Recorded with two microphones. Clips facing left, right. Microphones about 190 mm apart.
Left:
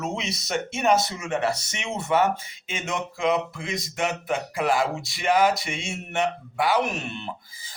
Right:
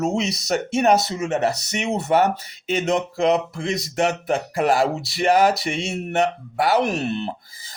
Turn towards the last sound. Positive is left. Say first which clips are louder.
# right 7 dB
turn(degrees=-35)  # may be behind; listen again after turning